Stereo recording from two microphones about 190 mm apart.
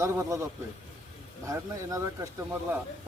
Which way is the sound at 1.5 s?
15° right (ahead or behind).